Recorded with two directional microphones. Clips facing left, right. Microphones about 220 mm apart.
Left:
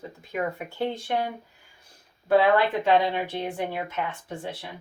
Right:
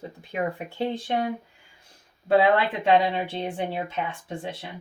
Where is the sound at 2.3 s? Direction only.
25° right (ahead or behind).